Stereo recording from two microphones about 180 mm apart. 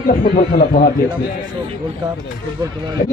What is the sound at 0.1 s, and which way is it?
Speech, 50° left (ahead or behind).